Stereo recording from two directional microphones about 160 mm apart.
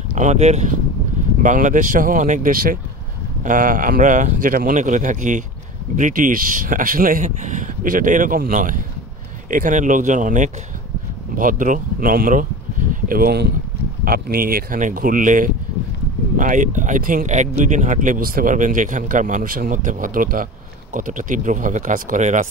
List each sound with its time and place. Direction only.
0.1 s speech: 45° right (ahead or behind)
13.1 s speech: 80° right
14.0 s speech: 65° right (ahead or behind); by 22.5 s 50° right (ahead or behind)